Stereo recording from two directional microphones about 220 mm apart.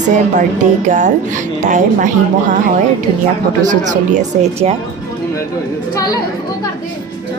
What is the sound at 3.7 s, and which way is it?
A woman's voice, 35° right (ahead or behind).